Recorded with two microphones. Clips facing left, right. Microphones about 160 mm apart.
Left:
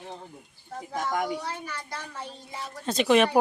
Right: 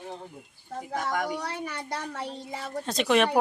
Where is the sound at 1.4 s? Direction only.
70° right (ahead or behind).